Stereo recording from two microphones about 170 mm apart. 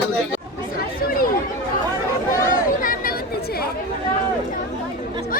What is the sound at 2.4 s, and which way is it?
Chatter, 50° left (ahead or behind).